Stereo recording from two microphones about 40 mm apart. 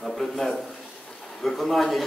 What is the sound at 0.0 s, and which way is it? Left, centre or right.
A man's voice, centre.